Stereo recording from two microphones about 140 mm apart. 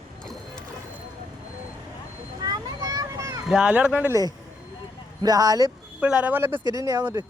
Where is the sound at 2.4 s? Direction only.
25° right (ahead or behind).